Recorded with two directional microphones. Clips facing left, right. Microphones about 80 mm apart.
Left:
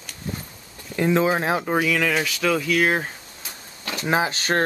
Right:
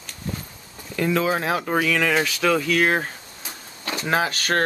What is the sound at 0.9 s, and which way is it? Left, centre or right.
Speech, left.